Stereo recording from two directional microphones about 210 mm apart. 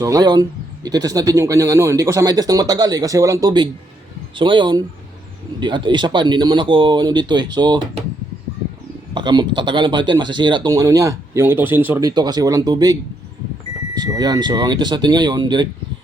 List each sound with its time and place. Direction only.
0.0 s speech: 15° right (ahead or behind)
9.1 s speech: 20° right (ahead or behind)
14.0 s speech: 20° right (ahead or behind)